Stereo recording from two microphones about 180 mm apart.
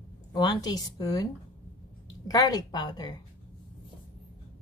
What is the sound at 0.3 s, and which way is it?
Speech, 20° left (ahead or behind).